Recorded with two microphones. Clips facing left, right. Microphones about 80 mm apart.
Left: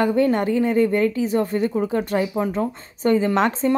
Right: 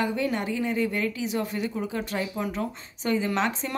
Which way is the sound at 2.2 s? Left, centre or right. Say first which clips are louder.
Left 7 dB; left.